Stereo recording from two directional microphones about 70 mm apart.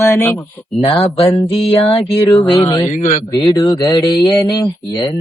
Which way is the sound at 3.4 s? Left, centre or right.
Left.